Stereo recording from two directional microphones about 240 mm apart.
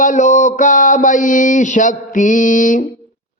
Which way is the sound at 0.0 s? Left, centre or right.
Left.